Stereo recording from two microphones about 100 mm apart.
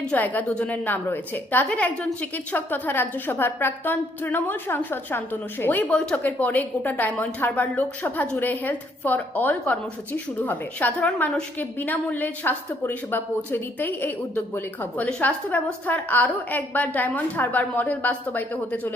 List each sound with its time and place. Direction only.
0.1 s a woman's voice: 15° left (ahead or behind)